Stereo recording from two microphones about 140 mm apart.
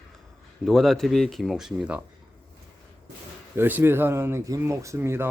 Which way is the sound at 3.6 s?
15° right (ahead or behind).